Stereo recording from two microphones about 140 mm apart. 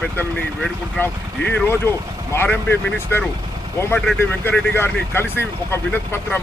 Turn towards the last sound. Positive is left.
turn(degrees=15)  # may be behind; listen again after turning